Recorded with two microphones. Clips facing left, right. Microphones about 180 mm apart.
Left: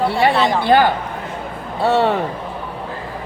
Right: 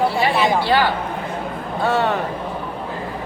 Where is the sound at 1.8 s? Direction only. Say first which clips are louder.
Left 4 dB; 30° left (ahead or behind).